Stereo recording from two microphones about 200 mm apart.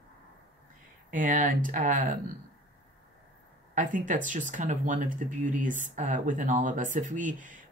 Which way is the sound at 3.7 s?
40° right (ahead or behind).